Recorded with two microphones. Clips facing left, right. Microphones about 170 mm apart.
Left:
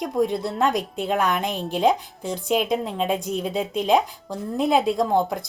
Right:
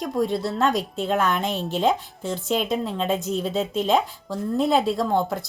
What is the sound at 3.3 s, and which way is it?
Speech, 10° left (ahead or behind).